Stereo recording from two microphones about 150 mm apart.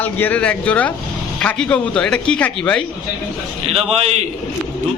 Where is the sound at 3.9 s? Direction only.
45° right (ahead or behind).